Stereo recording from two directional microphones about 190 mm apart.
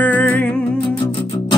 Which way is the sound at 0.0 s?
10° left (ahead or behind).